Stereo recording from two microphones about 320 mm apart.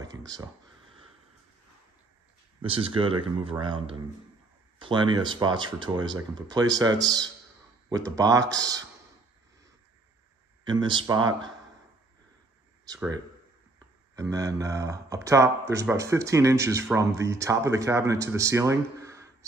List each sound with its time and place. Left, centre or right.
2.6 s speech: centre
10.6 s speech: centre
12.8 s speech: centre